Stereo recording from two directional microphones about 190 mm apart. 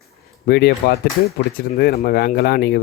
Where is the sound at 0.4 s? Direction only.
55° left (ahead or behind).